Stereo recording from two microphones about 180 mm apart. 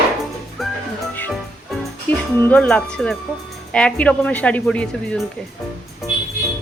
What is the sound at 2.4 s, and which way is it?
Speech, 10° left (ahead or behind).